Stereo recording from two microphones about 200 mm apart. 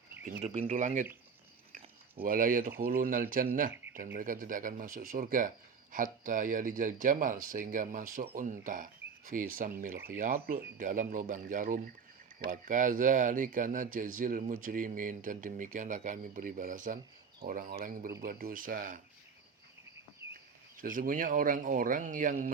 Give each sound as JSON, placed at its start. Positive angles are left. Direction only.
{"t": 0.4, "sound": "speech", "side_deg": -30}
{"t": 2.2, "sound": "speech", "side_deg": -45}
{"t": 20.7, "sound": "speech", "side_deg": -45}